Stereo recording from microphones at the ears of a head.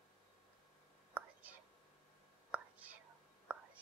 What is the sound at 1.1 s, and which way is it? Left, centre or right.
Whispering, right.